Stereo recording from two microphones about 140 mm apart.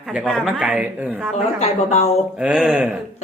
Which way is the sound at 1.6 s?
45° left (ahead or behind).